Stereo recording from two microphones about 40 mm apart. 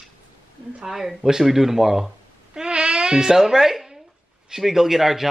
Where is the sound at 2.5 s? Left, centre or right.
Right.